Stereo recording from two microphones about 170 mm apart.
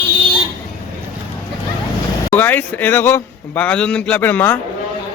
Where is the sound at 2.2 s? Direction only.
10° left (ahead or behind).